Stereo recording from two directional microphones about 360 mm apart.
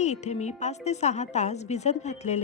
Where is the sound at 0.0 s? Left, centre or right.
Centre.